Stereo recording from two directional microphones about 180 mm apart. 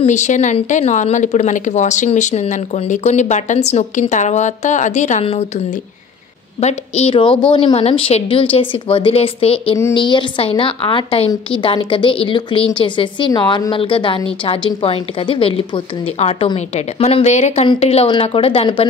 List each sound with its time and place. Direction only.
0.0 s speech: 40° left (ahead or behind)
6.6 s a woman's voice: 35° left (ahead or behind)